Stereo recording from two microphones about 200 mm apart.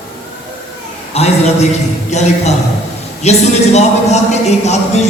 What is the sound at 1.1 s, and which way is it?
Speech, 30° left (ahead or behind).